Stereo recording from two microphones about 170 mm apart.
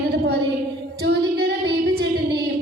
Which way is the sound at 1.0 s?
75° right (ahead or behind).